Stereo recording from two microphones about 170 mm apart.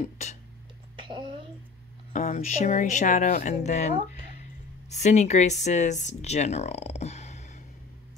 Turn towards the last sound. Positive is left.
turn(degrees=40)  # may be behind; listen again after turning